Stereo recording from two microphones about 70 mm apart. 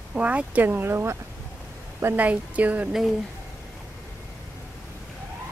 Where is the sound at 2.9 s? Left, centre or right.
Centre.